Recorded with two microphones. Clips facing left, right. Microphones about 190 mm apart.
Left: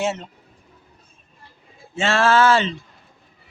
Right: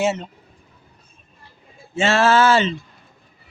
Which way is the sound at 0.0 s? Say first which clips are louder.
Right 3 dB; centre (ahead or behind).